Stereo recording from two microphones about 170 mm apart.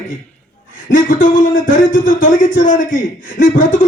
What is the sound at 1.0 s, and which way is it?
A man's voice, 50° left (ahead or behind).